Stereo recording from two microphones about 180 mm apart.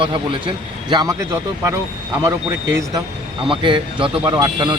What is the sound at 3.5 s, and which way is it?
Speech, 25° right (ahead or behind).